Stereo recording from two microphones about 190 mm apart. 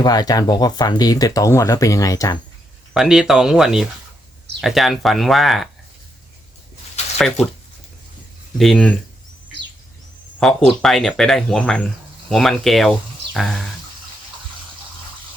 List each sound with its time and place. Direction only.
0.0 s speech: 20° left (ahead or behind)
2.9 s speech: 5° right (ahead or behind)
7.2 s speech: 5° left (ahead or behind)
8.5 s speech: centre (ahead or behind)
10.4 s speech: centre (ahead or behind)